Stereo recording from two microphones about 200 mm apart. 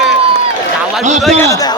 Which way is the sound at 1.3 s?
10° left (ahead or behind).